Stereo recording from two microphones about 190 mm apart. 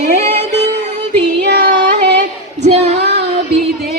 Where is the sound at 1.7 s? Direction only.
65° right (ahead or behind).